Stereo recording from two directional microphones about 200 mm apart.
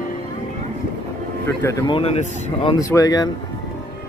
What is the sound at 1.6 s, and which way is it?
Speech, 15° left (ahead or behind).